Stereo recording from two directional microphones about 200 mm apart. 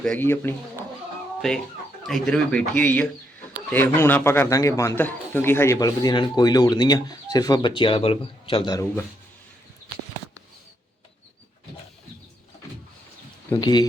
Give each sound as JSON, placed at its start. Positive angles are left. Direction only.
{"t": 0.0, "sound": "a man's voice", "side_deg": 10}
{"t": 13.6, "sound": "speech", "side_deg": 20}